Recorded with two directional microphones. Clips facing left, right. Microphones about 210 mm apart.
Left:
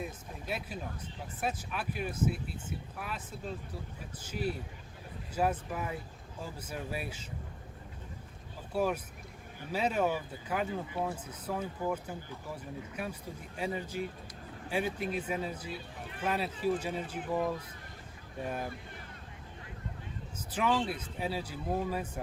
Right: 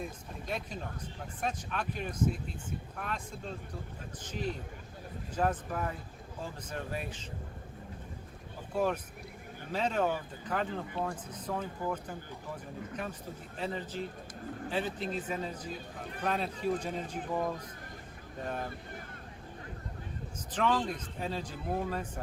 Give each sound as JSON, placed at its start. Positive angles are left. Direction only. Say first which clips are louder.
{"t": 0.0, "sound": "speech", "louder": "even", "side_deg": 5}
{"t": 8.7, "sound": "speech", "louder": "even", "side_deg": 10}
{"t": 15.7, "sound": "speech", "louder": "right 1 dB", "side_deg": -40}
{"t": 16.2, "sound": "speech", "louder": "left 1 dB", "side_deg": 5}
{"t": 18.4, "sound": "speech", "louder": "even", "side_deg": 10}
{"t": 20.5, "sound": "speech", "louder": "even", "side_deg": 10}